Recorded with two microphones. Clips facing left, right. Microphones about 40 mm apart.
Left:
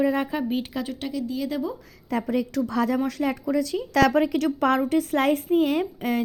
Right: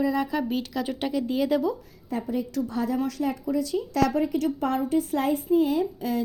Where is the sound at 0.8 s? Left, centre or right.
Centre.